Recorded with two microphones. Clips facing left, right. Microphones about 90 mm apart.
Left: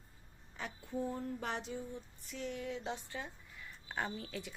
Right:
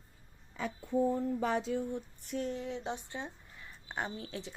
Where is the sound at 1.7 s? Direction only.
75° right (ahead or behind); by 2.4 s 60° right (ahead or behind).